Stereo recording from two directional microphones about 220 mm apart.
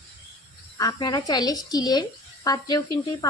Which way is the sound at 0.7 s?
15° left (ahead or behind).